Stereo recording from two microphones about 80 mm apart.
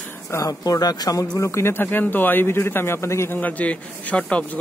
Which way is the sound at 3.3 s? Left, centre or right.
Centre.